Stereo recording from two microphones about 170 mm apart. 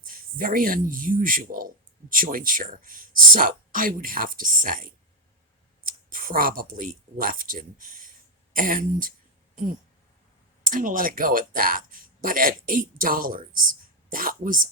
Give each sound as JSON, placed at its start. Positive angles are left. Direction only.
{"t": 0.1, "sound": "speech", "side_deg": -55}
{"t": 10.7, "sound": "speech", "side_deg": -55}